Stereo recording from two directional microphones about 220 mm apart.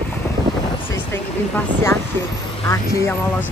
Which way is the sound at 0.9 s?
10° left (ahead or behind).